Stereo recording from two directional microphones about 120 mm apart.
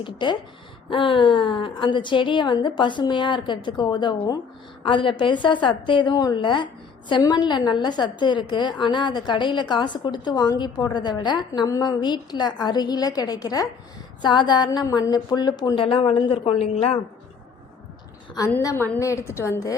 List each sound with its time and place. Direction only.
0.0 s a woman's voice: 40° left (ahead or behind)
15.7 s speech: 45° left (ahead or behind)
18.3 s a woman's voice: 25° left (ahead or behind)